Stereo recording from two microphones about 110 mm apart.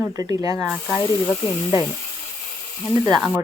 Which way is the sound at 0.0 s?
35° right (ahead or behind).